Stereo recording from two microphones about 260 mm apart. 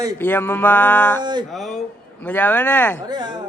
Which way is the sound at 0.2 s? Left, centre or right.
Centre.